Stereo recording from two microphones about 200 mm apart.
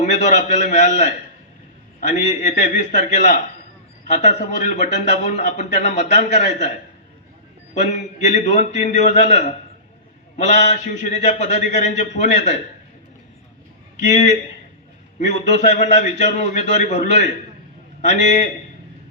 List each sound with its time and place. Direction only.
0.0 s a man's voice: 35° left (ahead or behind)
14.0 s a man's voice: 35° left (ahead or behind)